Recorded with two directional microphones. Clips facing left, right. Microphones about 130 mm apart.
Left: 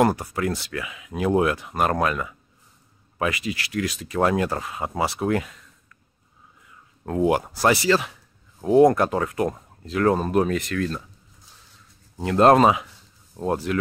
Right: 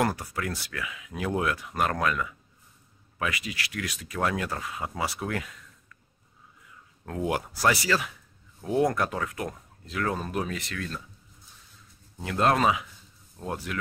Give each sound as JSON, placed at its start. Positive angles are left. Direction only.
{"t": 0.0, "sound": "speech", "side_deg": 25}
{"t": 7.1, "sound": "speech", "side_deg": 30}
{"t": 12.2, "sound": "speech", "side_deg": 40}